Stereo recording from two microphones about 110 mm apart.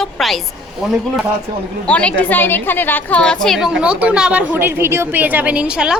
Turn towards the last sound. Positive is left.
turn(degrees=-10)  # may be behind; listen again after turning